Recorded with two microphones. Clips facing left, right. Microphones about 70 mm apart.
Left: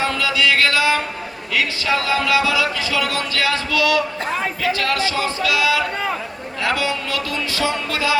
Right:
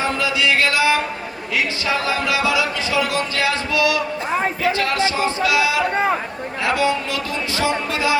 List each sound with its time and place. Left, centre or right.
0.0 s music: right
2.0 s music: right